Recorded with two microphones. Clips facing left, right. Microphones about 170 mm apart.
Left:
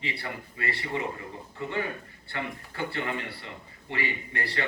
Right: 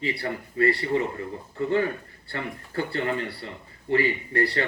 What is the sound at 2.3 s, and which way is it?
Speech, 40° right (ahead or behind).